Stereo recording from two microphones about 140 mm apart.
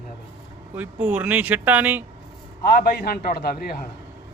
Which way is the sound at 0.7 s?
10° right (ahead or behind).